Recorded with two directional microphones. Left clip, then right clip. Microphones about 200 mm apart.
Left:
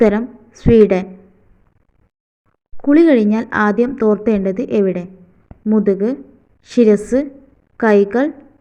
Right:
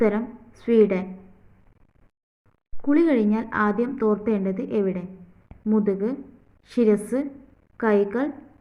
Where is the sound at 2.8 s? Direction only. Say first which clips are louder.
Left 9 dB; 25° left (ahead or behind).